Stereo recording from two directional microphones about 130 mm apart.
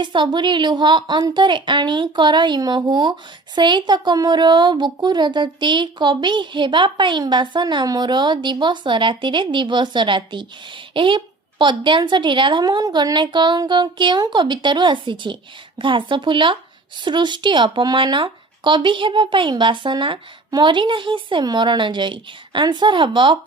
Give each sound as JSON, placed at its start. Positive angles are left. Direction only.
{"t": 0.0, "sound": "a woman's voice", "side_deg": -35}